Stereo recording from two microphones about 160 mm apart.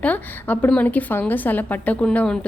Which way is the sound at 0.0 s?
10° left (ahead or behind).